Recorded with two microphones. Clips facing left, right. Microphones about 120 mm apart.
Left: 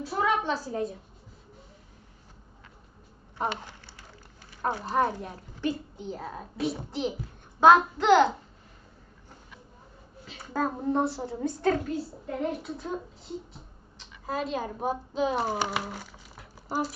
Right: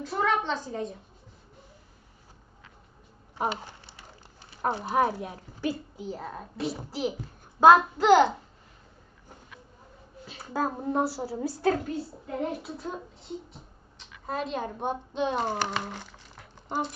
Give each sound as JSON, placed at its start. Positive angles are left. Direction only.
{"t": 0.0, "sound": "a woman's voice", "side_deg": 10}
{"t": 3.3, "sound": "a woman's voice", "side_deg": -15}
{"t": 10.3, "sound": "a woman's voice", "side_deg": -10}